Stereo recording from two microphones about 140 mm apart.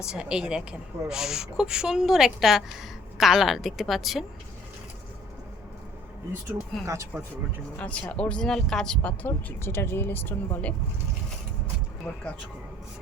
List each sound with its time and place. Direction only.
0.1 s a woman's voice: 5° right (ahead or behind)
6.8 s speech: 20° right (ahead or behind)
7.8 s speech: 10° left (ahead or behind)
12.1 s speech: 10° left (ahead or behind)